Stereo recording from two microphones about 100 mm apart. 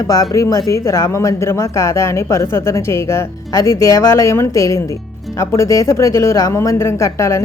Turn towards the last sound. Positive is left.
turn(degrees=30)  # may be behind; listen again after turning